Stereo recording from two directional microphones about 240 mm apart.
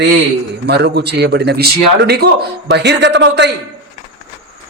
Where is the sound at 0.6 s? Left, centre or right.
Right.